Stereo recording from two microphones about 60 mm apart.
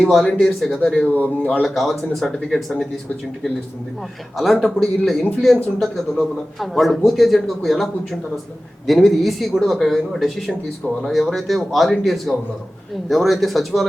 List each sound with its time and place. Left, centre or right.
0.0 s a man's voice: centre
1.0 s speech: left
1.6 s a man's voice: centre
4.4 s a man's voice: centre